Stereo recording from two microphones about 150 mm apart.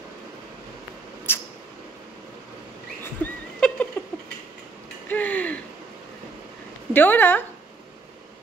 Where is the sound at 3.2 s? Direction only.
10° left (ahead or behind).